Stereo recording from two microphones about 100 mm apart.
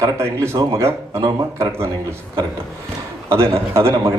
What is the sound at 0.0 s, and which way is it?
Speech, 30° right (ahead or behind).